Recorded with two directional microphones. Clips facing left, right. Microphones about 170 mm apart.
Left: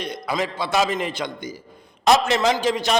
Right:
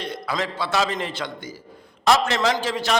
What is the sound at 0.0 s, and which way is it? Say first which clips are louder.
A man's voice: left 2 dB; 15° left (ahead or behind).